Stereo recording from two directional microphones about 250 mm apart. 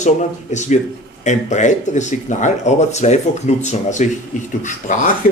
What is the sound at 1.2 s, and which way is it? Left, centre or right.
Speech, left.